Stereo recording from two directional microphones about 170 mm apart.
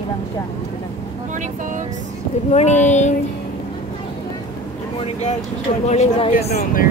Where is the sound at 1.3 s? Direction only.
50° right (ahead or behind).